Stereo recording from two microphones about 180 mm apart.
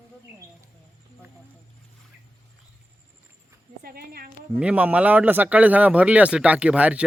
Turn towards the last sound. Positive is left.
turn(degrees=-5)  # may be behind; listen again after turning